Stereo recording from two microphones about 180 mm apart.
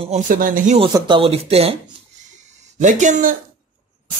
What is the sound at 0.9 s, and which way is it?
Speech, 25° right (ahead or behind).